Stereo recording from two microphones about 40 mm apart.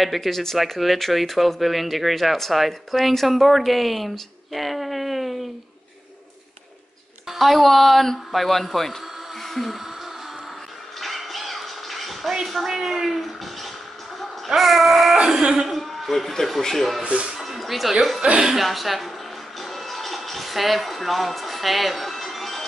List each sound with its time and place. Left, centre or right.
0.0 s speech: centre
7.2 s speech: centre
9.4 s music: centre
11.0 s music: centre
12.6 s a man's voice: centre
17.4 s music: centre
18.2 s speech: right
18.6 s speech: centre
19.6 s music: centre